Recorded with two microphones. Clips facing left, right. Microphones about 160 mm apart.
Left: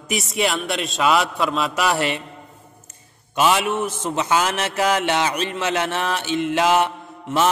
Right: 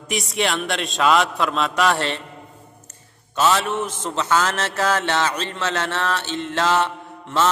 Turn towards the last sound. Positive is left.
turn(degrees=15)  # may be behind; listen again after turning